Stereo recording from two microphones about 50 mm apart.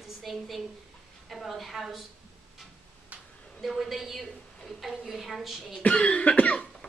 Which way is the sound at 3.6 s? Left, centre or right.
Centre.